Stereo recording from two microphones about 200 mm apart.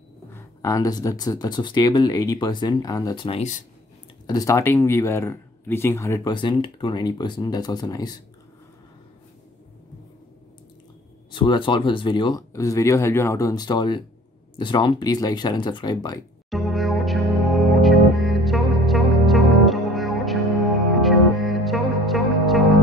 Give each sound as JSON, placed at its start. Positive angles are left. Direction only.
{"t": 0.3, "sound": "speech", "side_deg": 15}
{"t": 4.3, "sound": "speech", "side_deg": 15}
{"t": 11.3, "sound": "speech", "side_deg": 25}
{"t": 16.4, "sound": "music", "side_deg": 0}